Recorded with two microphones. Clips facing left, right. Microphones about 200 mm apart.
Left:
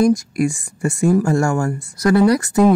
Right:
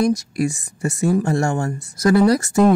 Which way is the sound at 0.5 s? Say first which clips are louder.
Left 2 dB; 20° right (ahead or behind).